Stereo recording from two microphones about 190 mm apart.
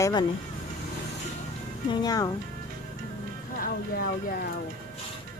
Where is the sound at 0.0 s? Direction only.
20° left (ahead or behind).